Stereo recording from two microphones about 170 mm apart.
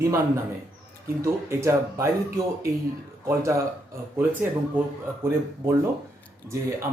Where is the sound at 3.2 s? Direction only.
15° right (ahead or behind).